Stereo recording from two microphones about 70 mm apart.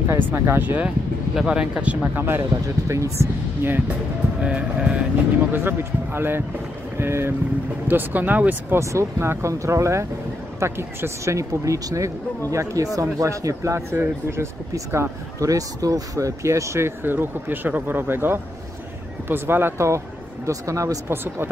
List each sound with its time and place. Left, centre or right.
0.3 s speech: right
1.3 s speech: centre
2.1 s speech: right
2.9 s speech: right
4.4 s speech: centre
5.5 s speech: right
8.7 s speech: right
11.3 s speech: right
17.0 s speech: right
20.4 s speech: right
21.1 s speech: right